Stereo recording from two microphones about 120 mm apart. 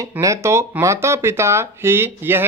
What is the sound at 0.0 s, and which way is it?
Speech, 25° right (ahead or behind).